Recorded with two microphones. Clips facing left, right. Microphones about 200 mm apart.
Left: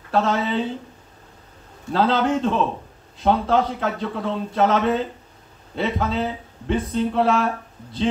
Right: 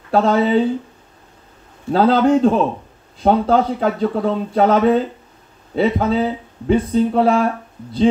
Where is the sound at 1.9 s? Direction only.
40° right (ahead or behind).